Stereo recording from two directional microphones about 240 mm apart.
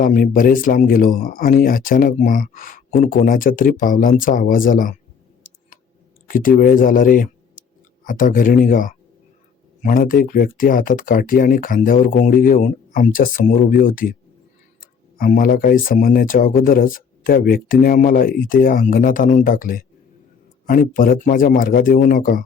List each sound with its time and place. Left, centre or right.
0.0 s speech: left
6.2 s speech: left